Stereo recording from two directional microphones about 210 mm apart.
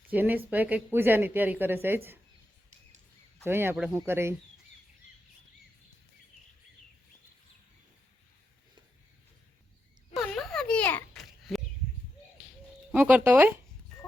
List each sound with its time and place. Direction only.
0.1 s speech: 10° right (ahead or behind)
3.4 s speech: 10° right (ahead or behind)
10.2 s a sound: centre (ahead or behind)
12.9 s speech: 5° right (ahead or behind)